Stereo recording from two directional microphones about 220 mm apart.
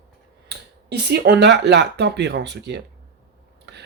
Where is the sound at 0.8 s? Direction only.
50° right (ahead or behind).